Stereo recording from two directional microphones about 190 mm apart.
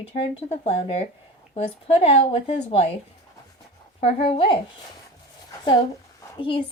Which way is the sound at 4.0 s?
30° left (ahead or behind).